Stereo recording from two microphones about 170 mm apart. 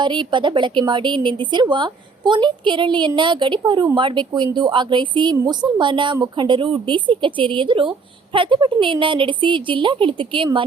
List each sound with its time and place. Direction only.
0.0 s speech: 30° right (ahead or behind)